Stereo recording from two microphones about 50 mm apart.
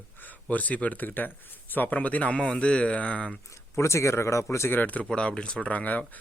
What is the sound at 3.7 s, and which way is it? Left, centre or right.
Speech, left.